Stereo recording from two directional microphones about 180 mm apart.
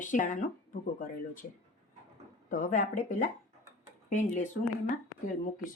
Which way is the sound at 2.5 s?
45° left (ahead or behind).